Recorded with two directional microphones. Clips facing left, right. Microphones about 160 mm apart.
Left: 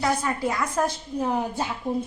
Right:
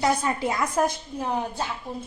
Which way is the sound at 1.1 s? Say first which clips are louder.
Left 2 dB; centre (ahead or behind).